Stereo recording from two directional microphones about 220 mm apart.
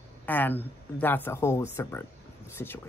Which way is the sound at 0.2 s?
10° left (ahead or behind).